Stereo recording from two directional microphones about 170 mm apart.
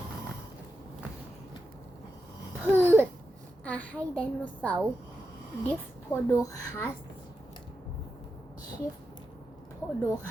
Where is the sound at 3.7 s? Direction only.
10° left (ahead or behind).